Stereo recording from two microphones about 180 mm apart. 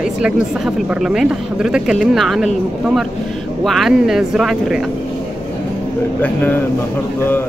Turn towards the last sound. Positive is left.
turn(degrees=10)  # may be behind; listen again after turning